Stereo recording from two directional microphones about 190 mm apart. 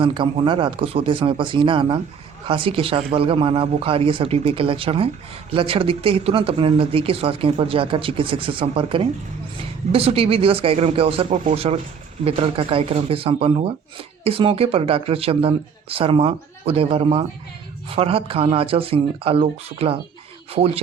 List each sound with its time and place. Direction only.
0.0 s a man's voice: 25° right (ahead or behind)